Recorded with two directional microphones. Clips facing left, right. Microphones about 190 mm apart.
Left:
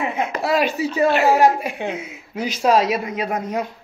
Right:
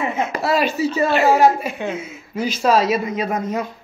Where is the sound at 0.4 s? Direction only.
15° left (ahead or behind).